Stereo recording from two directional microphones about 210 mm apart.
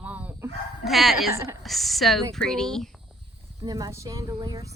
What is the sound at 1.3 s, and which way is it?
Speech, 15° right (ahead or behind).